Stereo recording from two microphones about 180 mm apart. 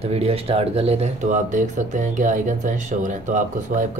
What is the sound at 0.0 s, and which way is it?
Speech, 35° right (ahead or behind).